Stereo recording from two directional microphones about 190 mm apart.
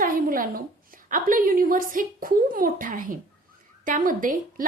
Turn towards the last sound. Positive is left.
turn(degrees=-45)  # may be behind; listen again after turning